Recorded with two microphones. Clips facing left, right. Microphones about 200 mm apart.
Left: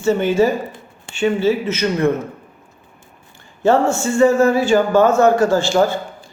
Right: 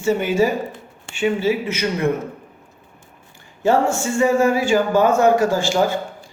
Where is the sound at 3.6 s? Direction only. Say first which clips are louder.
Left 2 dB; 10° right (ahead or behind).